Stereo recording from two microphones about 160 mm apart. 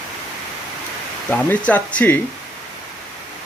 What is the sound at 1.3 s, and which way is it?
Speech, 10° left (ahead or behind).